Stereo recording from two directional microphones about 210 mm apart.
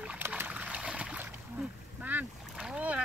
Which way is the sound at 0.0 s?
5° right (ahead or behind).